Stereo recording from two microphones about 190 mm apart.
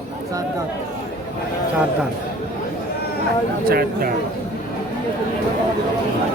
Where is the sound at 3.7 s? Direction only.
50° right (ahead or behind).